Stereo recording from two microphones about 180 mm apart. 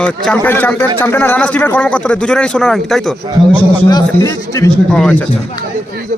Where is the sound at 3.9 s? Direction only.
20° left (ahead or behind).